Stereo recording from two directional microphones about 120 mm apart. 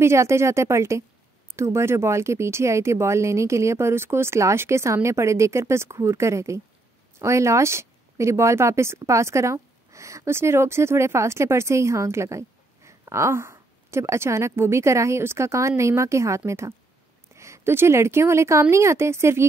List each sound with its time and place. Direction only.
0.0 s speech: 20° right (ahead or behind)